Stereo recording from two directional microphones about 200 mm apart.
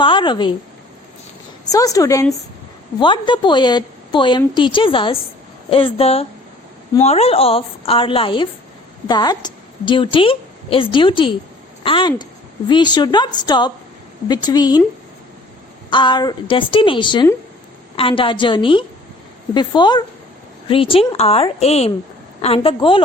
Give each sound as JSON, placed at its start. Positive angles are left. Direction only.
{"t": 0.0, "sound": "a woman's voice", "side_deg": 25}
{"t": 1.7, "sound": "a woman's voice", "side_deg": 15}
{"t": 15.9, "sound": "a woman's voice", "side_deg": 25}